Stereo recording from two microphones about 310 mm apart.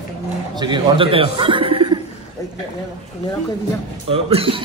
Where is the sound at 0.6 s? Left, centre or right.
Centre.